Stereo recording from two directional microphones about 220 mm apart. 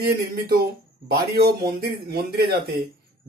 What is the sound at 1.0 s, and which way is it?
A man's voice, 45° right (ahead or behind).